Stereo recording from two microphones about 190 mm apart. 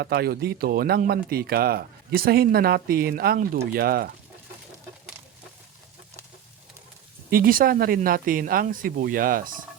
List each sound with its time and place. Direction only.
0.0 s speech: 55° right (ahead or behind)
7.3 s speech: 50° right (ahead or behind)